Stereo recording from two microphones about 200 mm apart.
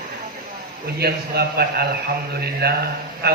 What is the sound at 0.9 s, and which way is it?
A man's voice, 50° right (ahead or behind).